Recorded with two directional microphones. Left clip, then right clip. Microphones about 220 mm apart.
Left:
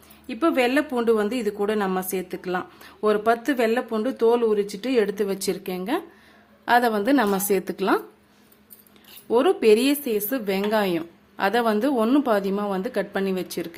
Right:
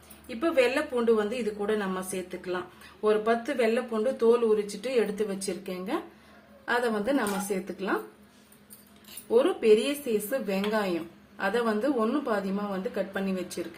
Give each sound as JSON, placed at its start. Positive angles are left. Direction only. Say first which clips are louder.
{"t": 0.3, "sound": "a woman's voice", "louder": "left 3 dB", "side_deg": 50}
{"t": 9.3, "sound": "a woman's voice", "louder": "left 4 dB", "side_deg": 50}